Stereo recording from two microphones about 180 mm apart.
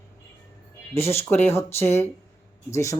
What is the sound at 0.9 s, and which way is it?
Speech, 15° left (ahead or behind).